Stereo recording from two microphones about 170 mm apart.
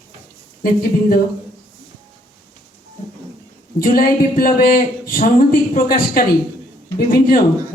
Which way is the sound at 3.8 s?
60° left (ahead or behind).